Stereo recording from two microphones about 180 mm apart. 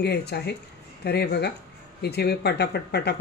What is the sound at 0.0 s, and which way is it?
Speech, 65° left (ahead or behind).